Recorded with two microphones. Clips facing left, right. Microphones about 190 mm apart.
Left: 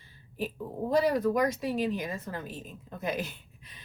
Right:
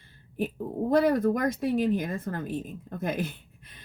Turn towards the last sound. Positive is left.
turn(degrees=-50)  # may be behind; listen again after turning